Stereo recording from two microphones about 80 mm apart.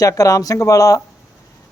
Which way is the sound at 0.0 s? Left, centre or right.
Left.